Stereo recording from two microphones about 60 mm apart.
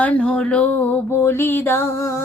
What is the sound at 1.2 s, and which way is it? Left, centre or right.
Music, left.